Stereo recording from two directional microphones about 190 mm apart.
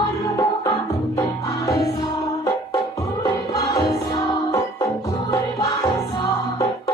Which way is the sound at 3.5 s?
15° left (ahead or behind).